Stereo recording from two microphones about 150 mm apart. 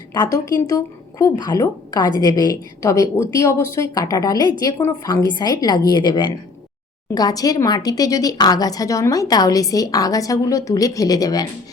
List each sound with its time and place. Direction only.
0.1 s speech: 25° left (ahead or behind)